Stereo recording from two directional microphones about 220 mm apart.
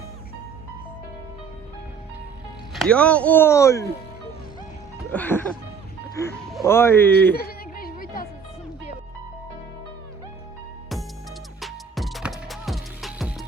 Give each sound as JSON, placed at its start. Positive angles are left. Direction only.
{"t": 2.7, "sound": "speech", "side_deg": 5}
{"t": 5.1, "sound": "speech", "side_deg": 5}
{"t": 7.3, "sound": "music", "side_deg": 45}
{"t": 11.6, "sound": "music", "side_deg": 0}